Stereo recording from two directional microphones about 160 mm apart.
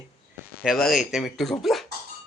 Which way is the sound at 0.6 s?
Centre (ahead or behind).